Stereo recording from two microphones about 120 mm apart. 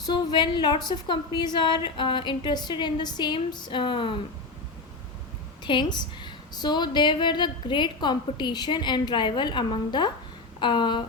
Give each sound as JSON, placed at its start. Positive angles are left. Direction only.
{"t": 0.0, "sound": "a woman's voice", "side_deg": 40}
{"t": 5.6, "sound": "a woman's voice", "side_deg": 40}